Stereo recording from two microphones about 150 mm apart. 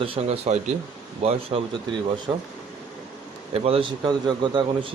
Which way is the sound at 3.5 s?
40° right (ahead or behind).